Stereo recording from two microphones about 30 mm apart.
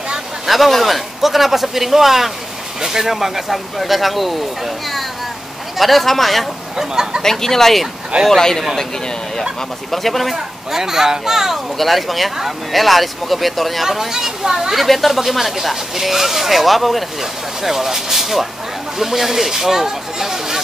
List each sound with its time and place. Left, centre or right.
0.5 s a man's voice: centre
6.8 s speech: centre
7.2 s speech: centre
9.8 s speech: centre
10.3 s a man's voice: centre
11.8 s speech: centre
13.8 s a man's voice: centre
17.6 s a man's voice: centre